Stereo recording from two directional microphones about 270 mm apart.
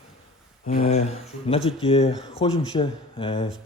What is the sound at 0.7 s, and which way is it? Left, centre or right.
A man's voice, left.